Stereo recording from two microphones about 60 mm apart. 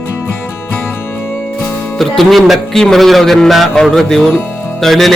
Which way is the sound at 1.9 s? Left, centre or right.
Centre.